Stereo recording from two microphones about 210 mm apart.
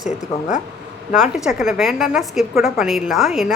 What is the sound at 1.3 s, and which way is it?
A woman's voice, centre (ahead or behind).